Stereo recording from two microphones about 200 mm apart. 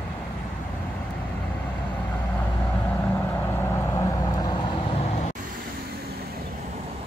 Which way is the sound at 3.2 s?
15° left (ahead or behind).